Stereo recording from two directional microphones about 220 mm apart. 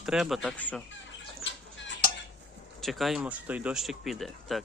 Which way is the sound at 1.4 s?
55° left (ahead or behind).